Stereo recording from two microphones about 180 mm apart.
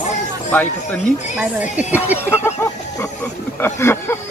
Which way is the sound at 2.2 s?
15° left (ahead or behind).